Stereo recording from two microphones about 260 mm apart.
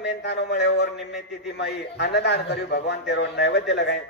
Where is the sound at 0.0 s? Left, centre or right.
Left.